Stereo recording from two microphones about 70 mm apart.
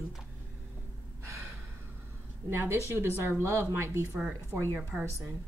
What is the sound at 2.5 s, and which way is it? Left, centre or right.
A woman's voice, right.